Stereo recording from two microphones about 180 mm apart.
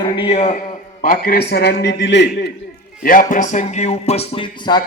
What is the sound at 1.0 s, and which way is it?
A man's voice, 55° left (ahead or behind).